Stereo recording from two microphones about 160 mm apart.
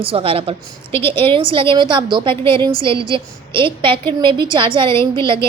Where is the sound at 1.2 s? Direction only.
35° right (ahead or behind).